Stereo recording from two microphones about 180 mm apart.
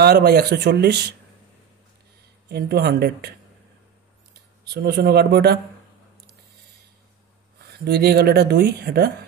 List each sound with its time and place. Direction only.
0.0 s speech: 60° right (ahead or behind)
2.5 s speech: 60° right (ahead or behind)
4.6 s speech: 65° right (ahead or behind)
7.8 s speech: 60° right (ahead or behind)